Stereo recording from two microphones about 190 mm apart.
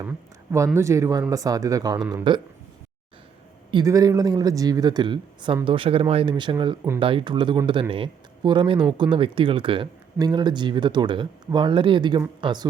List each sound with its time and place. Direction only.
0.0 s speech: 15° right (ahead or behind)
3.7 s speech: 20° right (ahead or behind)